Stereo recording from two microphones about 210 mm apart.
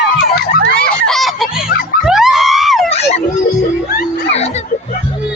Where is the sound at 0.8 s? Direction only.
Centre (ahead or behind).